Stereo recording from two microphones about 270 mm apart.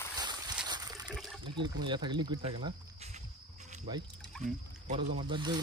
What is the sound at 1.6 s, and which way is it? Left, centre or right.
Speech, centre.